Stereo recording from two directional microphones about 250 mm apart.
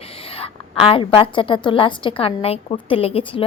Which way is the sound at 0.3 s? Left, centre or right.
Left.